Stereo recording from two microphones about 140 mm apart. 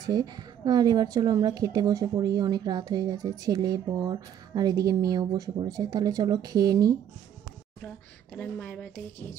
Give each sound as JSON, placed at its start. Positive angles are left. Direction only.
{"t": 0.0, "sound": "a woman's voice", "side_deg": -25}
{"t": 8.4, "sound": "speech", "side_deg": 10}